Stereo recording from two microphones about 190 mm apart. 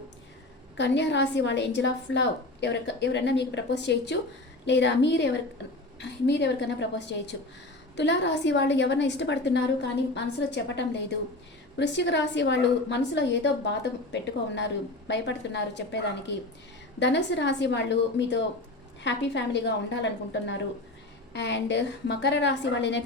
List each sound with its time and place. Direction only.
0.8 s a woman's voice: 65° left (ahead or behind)